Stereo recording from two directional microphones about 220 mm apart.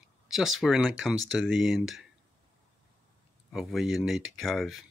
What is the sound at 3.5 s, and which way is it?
Speech, centre (ahead or behind).